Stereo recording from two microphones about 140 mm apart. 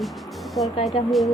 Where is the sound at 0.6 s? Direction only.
25° left (ahead or behind).